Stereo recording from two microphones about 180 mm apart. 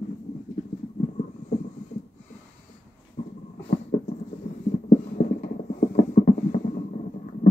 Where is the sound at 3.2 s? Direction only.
45° left (ahead or behind).